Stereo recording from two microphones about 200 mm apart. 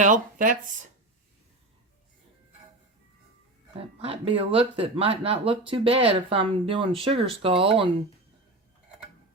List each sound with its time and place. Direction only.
0.0 s speech: 40° right (ahead or behind)
4.0 s speech: 30° right (ahead or behind)